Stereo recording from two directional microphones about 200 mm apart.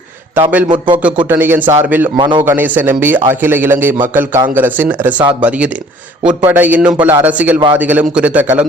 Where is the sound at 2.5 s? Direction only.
10° right (ahead or behind).